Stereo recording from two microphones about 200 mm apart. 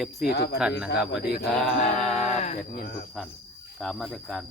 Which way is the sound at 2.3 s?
35° left (ahead or behind).